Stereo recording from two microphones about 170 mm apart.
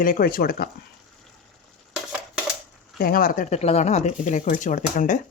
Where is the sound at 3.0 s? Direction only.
60° left (ahead or behind).